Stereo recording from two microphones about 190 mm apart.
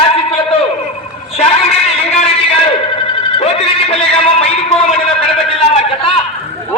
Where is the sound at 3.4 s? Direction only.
30° left (ahead or behind).